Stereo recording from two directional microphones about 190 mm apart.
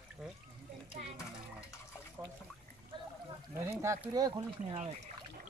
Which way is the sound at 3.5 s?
15° right (ahead or behind).